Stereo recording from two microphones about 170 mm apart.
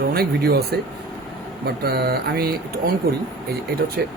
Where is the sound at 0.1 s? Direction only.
65° right (ahead or behind).